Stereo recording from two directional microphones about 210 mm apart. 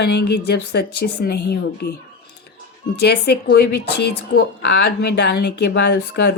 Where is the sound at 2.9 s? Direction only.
50° left (ahead or behind).